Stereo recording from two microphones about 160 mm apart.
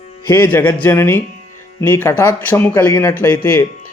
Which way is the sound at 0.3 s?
15° left (ahead or behind).